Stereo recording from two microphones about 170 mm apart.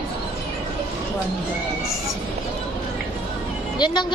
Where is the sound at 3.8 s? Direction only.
25° left (ahead or behind).